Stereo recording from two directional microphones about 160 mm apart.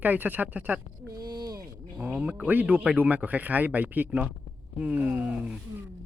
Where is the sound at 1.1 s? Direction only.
25° right (ahead or behind).